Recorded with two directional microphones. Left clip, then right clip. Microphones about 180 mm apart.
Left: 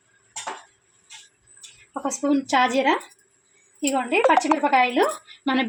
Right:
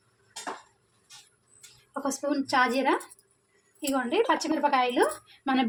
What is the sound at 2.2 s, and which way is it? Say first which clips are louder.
A woman's voice: left 5 dB; 25° left (ahead or behind).